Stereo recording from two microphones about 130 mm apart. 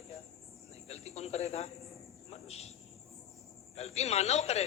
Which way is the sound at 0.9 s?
55° left (ahead or behind).